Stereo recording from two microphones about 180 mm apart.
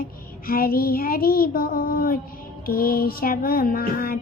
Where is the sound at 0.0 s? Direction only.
55° left (ahead or behind).